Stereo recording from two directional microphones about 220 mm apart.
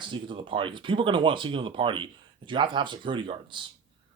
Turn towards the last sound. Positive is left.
turn(degrees=-20)  # may be behind; listen again after turning